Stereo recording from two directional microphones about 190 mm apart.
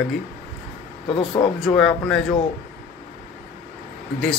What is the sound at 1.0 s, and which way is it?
Speech, 25° left (ahead or behind).